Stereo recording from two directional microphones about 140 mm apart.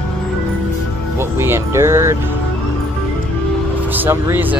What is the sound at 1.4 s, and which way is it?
Speech, 20° right (ahead or behind).